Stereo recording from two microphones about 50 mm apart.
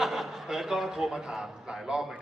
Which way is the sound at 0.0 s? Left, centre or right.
Centre.